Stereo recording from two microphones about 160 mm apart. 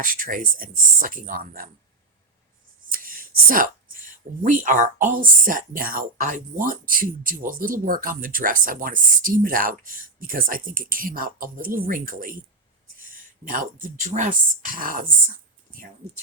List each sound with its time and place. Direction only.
0.0 s speech: 60° right (ahead or behind)
2.9 s a sound: 60° right (ahead or behind)
4.4 s speech: 55° right (ahead or behind)